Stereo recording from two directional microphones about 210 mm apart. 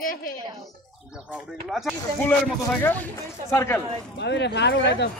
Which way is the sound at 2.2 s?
10° left (ahead or behind).